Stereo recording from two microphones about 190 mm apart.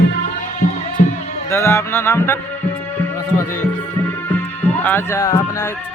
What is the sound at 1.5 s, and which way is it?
Speech, 15° left (ahead or behind).